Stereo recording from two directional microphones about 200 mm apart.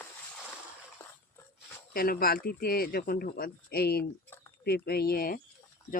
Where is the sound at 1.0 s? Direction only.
10° left (ahead or behind).